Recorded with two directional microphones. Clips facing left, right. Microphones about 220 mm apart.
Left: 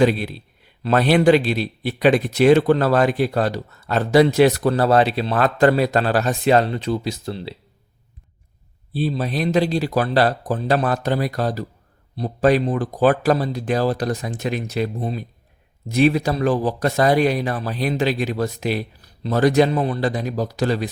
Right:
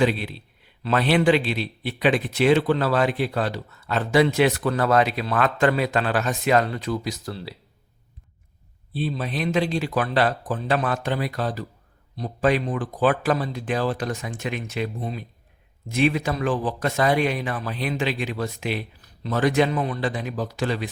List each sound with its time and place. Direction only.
0.0 s speech: 40° left (ahead or behind); by 7.5 s 25° left (ahead or behind)
8.9 s speech: 40° left (ahead or behind)